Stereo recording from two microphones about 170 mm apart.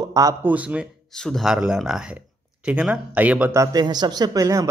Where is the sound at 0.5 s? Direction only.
5° right (ahead or behind).